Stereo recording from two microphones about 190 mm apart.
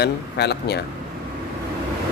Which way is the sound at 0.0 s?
60° left (ahead or behind).